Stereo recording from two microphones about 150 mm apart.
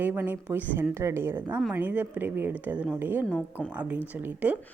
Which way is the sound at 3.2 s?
5° left (ahead or behind).